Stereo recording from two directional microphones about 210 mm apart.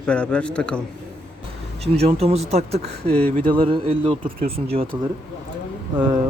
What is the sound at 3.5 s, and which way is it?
Speech, 25° right (ahead or behind).